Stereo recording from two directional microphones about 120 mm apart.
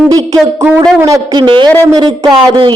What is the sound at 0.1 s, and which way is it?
Speech, 30° right (ahead or behind).